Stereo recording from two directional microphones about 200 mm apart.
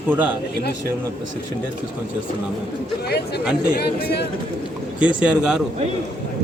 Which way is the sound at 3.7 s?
50° left (ahead or behind).